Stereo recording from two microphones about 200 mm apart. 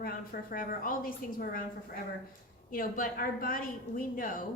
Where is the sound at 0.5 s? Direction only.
45° left (ahead or behind).